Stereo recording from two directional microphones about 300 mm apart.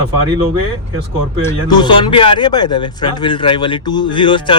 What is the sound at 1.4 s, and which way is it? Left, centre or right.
Speech, centre.